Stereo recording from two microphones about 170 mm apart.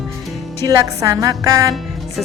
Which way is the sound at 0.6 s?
20° right (ahead or behind).